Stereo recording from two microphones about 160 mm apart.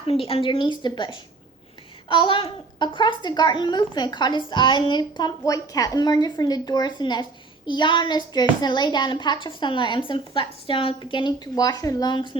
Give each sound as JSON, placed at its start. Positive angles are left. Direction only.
{"t": 0.1, "sound": "a woman's voice", "side_deg": 35}